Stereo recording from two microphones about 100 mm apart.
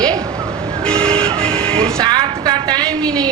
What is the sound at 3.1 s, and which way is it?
Speech, 10° left (ahead or behind).